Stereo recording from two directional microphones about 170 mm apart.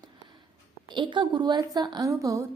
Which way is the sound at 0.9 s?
30° right (ahead or behind).